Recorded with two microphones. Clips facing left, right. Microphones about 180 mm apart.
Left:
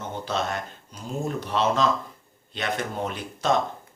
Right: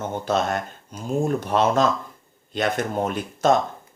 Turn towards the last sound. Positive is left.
turn(degrees=-45)  # may be behind; listen again after turning